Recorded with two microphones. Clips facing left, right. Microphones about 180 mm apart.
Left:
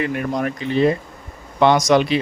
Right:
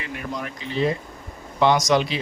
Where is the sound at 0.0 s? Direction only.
55° left (ahead or behind).